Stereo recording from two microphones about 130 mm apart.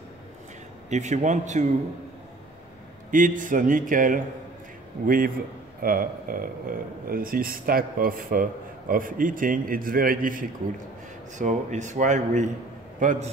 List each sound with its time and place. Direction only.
0.8 s speech: 65° right (ahead or behind)
3.1 s speech: 90° right
11.3 s speech: 70° right (ahead or behind)